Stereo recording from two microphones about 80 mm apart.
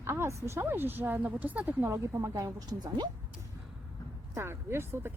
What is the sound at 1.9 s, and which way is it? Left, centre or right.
A woman's voice, right.